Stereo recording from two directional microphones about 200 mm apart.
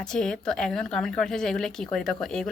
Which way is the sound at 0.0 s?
5° left (ahead or behind).